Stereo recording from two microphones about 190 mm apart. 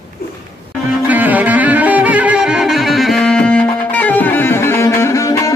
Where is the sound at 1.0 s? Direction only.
10° right (ahead or behind).